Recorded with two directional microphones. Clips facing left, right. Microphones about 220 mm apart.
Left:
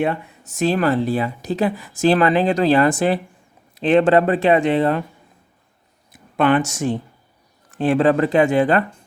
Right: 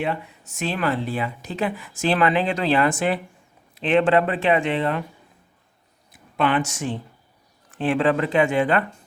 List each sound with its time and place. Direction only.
0.0 s speech: 45° left (ahead or behind)
6.3 s a woman's voice: 50° left (ahead or behind)